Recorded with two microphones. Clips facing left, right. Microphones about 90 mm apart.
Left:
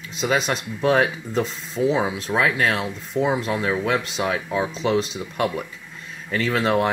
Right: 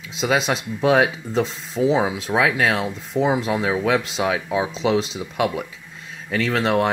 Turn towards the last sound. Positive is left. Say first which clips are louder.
# right 1 dB
turn(degrees=0)  # may be behind; listen again after turning